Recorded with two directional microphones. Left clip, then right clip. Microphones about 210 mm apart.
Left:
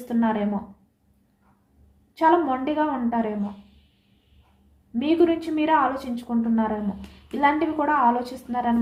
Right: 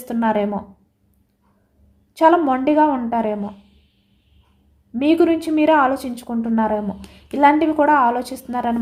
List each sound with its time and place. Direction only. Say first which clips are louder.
0.1 s a woman's voice: right 6 dB; 55° right (ahead or behind)
2.1 s a woman's voice: right 5 dB; 55° right (ahead or behind)
4.9 s a woman's voice: right 5 dB; 50° right (ahead or behind)